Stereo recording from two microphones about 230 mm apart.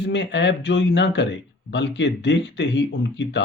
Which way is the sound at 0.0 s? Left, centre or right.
Left.